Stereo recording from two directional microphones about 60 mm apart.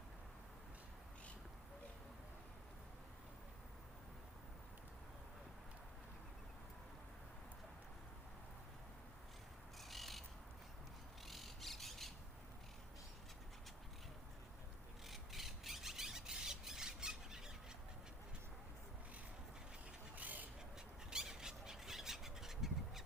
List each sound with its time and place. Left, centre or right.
9.9 s bird: centre
11.3 s bird: centre
15.0 s a sound: centre
20.1 s duck: right
20.7 s bird: centre